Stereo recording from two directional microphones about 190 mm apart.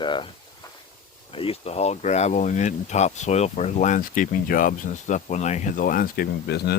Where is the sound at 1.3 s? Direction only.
30° left (ahead or behind); by 6.7 s 55° left (ahead or behind).